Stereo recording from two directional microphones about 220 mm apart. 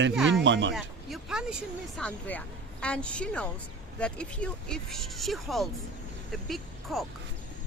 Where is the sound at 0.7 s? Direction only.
Centre (ahead or behind).